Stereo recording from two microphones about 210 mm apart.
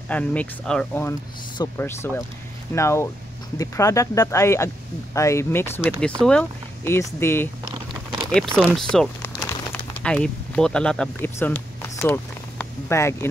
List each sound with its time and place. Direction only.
0.1 s speech: 5° left (ahead or behind)
7.9 s a sound: centre (ahead or behind)
8.5 s speech: centre (ahead or behind)